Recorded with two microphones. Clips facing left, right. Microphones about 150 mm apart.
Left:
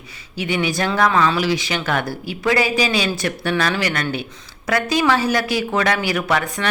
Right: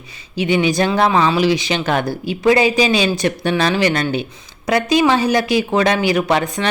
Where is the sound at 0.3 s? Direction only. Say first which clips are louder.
Right 5 dB; 20° right (ahead or behind).